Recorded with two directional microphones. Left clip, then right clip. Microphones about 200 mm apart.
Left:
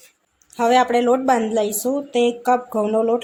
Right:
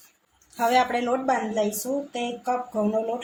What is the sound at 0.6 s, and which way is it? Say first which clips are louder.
A woman's voice: left 6 dB; 35° left (ahead or behind).